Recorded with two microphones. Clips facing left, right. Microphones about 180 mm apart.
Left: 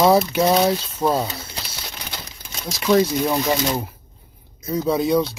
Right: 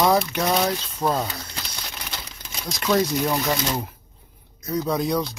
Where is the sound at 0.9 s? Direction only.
10° left (ahead or behind).